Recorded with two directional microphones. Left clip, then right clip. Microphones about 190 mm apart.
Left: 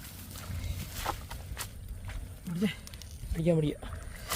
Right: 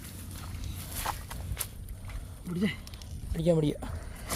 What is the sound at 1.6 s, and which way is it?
Walk, 10° right (ahead or behind).